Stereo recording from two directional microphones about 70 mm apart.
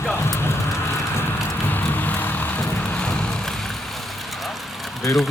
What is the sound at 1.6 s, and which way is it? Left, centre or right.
Vehicle, left.